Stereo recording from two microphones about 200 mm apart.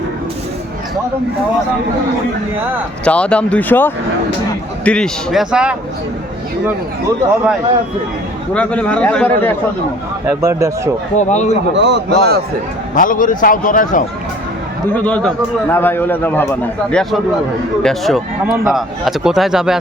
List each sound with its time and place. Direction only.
3.0 s a man's voice: 5° left (ahead or behind)
8.5 s a man's voice: 5° left (ahead or behind)
10.2 s speech: 15° right (ahead or behind)
11.2 s speech: 35° left (ahead or behind)
11.7 s a man's voice: 60° right (ahead or behind)
12.9 s a man's voice: 45° left (ahead or behind)
14.9 s a man's voice: 5° left (ahead or behind)